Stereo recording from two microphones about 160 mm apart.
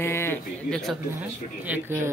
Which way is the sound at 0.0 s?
15° left (ahead or behind).